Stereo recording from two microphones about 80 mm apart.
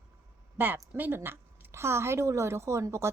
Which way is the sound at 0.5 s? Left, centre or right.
Right.